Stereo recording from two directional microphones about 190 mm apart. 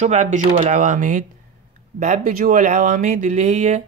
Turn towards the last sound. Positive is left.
turn(degrees=-40)  # may be behind; listen again after turning